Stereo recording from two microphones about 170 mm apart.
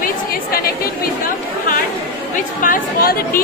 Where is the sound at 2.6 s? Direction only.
55° left (ahead or behind).